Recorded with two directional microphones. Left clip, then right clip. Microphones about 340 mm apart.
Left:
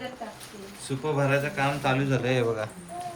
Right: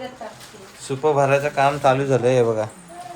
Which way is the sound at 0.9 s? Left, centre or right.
Centre.